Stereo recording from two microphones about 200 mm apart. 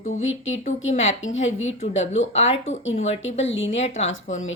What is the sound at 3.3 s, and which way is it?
Speech, 70° left (ahead or behind).